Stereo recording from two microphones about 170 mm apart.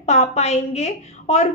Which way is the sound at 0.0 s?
40° left (ahead or behind).